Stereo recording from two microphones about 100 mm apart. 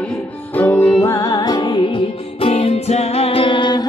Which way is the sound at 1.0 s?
35° left (ahead or behind).